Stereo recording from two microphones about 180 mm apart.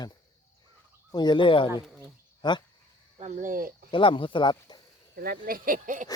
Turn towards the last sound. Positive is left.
turn(degrees=-45)  # may be behind; listen again after turning